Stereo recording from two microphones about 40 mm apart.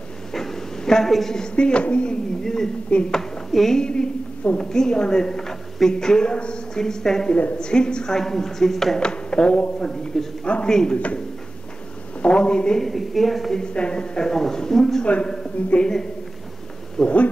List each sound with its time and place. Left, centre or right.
0.3 s a sound: centre
1.5 s speech: left
2.4 s a man's voice: centre
3.8 s a man's voice: centre
8.9 s speech: left
9.8 s a man's voice: centre
10.4 s speech: left
10.7 s a man's voice: centre
12.2 s speech: left
12.8 s a woman's voice: centre
13.6 s a man's voice: left; by 15.0 s centre
15.6 s speech: left
17.0 s speech: left